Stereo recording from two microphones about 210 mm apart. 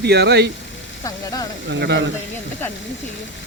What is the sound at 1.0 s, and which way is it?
Speech, 15° left (ahead or behind).